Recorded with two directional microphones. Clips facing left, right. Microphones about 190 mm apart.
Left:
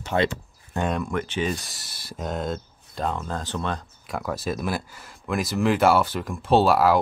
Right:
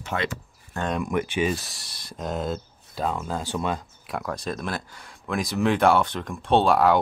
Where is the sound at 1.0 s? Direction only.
15° right (ahead or behind).